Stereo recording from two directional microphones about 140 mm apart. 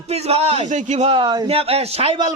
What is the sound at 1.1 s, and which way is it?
A man's voice, 35° right (ahead or behind).